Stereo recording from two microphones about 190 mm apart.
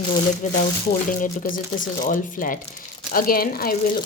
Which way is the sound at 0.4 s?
40° left (ahead or behind).